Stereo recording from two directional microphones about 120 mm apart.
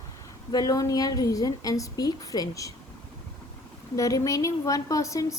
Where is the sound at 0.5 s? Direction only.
30° left (ahead or behind).